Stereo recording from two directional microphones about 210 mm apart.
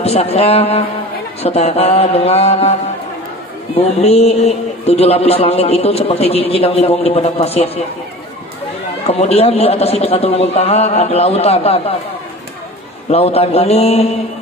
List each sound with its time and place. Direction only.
0.0 s a man's voice: 30° left (ahead or behind)
4.0 s a man's voice: 30° left (ahead or behind)
9.0 s a man's voice: 30° left (ahead or behind)
13.1 s a man's voice: 30° left (ahead or behind)